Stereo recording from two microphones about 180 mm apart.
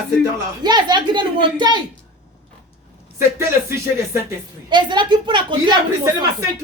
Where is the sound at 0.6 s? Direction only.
25° right (ahead or behind).